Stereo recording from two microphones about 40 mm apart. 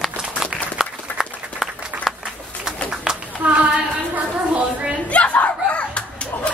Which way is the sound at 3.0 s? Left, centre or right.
Centre.